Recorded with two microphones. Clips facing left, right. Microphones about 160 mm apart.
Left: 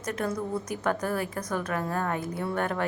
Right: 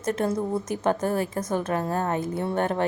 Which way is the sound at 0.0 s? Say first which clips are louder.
Right 5 dB; 25° right (ahead or behind).